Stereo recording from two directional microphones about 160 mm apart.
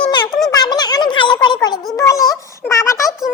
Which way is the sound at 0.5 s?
25° left (ahead or behind).